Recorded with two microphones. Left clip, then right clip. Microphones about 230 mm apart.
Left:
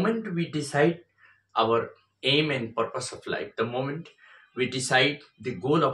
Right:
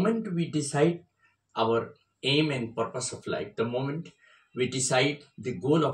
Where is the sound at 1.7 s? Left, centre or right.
Centre.